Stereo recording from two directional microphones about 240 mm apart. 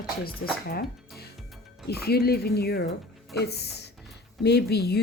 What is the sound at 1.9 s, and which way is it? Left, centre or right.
Speech, left.